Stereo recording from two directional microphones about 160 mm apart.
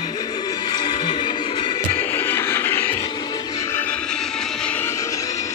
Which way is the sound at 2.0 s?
15° left (ahead or behind).